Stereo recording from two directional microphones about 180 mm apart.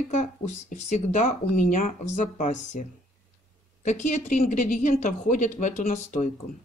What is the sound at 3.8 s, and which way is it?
A woman's voice, 40° left (ahead or behind).